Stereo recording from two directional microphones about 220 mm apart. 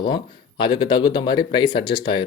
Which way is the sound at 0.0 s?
20° left (ahead or behind).